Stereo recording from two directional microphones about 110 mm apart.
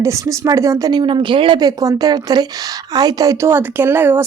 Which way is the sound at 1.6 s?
35° right (ahead or behind).